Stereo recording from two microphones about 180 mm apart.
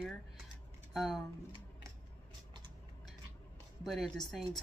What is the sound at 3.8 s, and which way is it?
Speech, centre (ahead or behind).